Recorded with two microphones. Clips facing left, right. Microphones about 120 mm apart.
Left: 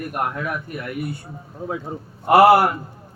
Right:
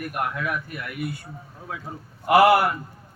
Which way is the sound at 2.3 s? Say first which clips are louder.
Left 4 dB; 30° left (ahead or behind).